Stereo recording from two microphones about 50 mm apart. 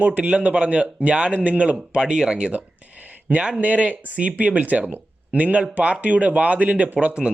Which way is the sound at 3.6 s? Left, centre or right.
Right.